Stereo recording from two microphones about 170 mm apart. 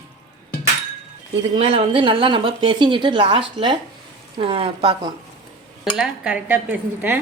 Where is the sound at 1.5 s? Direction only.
30° right (ahead or behind).